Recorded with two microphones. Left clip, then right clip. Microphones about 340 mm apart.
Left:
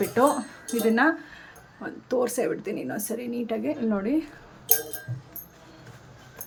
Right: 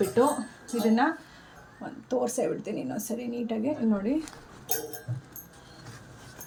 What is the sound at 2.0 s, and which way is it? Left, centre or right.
A woman's voice, centre.